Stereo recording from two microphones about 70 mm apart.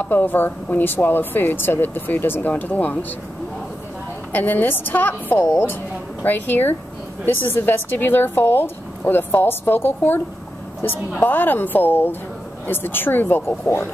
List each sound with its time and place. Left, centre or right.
0.0 s speech: left
4.3 s a woman's voice: left